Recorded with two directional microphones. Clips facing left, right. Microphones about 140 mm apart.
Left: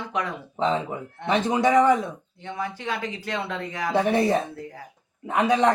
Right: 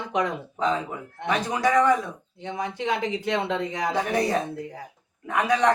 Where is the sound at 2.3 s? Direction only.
20° right (ahead or behind).